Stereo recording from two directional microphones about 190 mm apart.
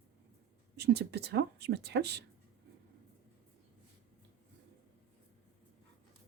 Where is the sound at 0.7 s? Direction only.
60° right (ahead or behind).